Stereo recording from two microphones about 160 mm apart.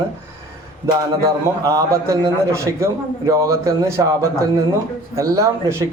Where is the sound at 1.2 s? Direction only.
20° right (ahead or behind).